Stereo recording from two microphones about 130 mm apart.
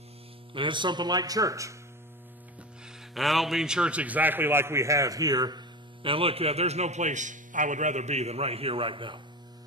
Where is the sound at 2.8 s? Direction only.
Centre (ahead or behind); by 9.1 s 40° right (ahead or behind).